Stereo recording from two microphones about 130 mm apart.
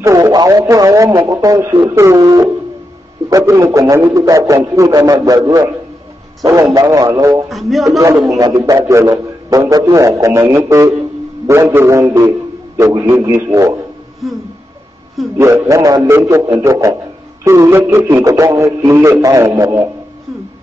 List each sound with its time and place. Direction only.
0.0 s a man's voice: 25° right (ahead or behind)
7.4 s a man's voice: centre (ahead or behind)
8.3 s a man's voice: 25° right (ahead or behind)
15.3 s a man's voice: 20° right (ahead or behind)